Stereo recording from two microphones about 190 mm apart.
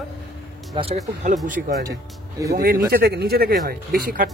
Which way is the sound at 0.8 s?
25° right (ahead or behind).